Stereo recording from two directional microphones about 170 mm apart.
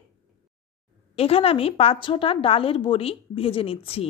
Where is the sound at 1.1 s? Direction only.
35° left (ahead or behind).